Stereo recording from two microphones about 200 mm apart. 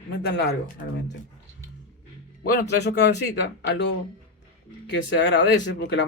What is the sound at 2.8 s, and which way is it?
Speech, 55° left (ahead or behind).